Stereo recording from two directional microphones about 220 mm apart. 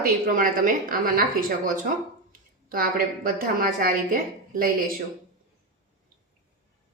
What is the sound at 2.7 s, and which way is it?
Speech, 40° right (ahead or behind).